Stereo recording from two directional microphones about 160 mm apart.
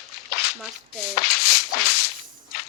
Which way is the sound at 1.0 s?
75° left (ahead or behind).